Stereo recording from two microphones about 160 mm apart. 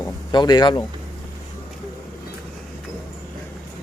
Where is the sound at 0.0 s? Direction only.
25° left (ahead or behind).